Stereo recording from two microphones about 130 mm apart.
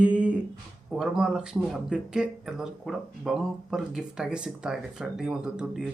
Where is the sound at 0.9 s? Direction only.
5° right (ahead or behind).